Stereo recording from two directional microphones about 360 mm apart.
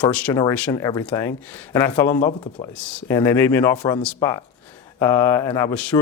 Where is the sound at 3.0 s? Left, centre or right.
Centre.